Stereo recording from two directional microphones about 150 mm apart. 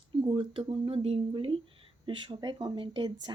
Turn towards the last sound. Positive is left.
turn(degrees=-30)  # may be behind; listen again after turning